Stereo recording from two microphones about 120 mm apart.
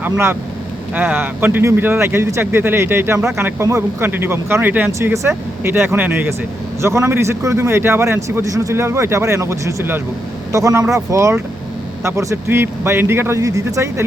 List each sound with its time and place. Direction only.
0.0 s a man's voice: 20° right (ahead or behind)